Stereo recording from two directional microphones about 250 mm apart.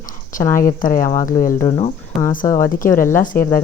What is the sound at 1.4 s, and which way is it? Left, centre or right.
Speech, left.